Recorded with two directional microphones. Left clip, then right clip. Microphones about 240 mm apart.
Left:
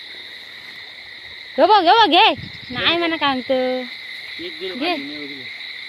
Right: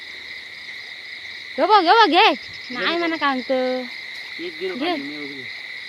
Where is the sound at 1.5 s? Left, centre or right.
Centre.